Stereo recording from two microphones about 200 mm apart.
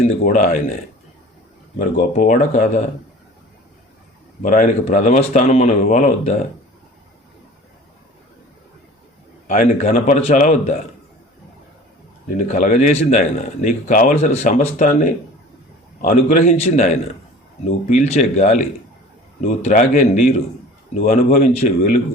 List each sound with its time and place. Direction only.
0.0 s speech: 40° left (ahead or behind)
1.8 s speech: 40° left (ahead or behind)
4.4 s speech: 40° left (ahead or behind)
9.5 s speech: 35° left (ahead or behind)
12.5 s speech: 40° left (ahead or behind)
16.0 s speech: 40° left (ahead or behind)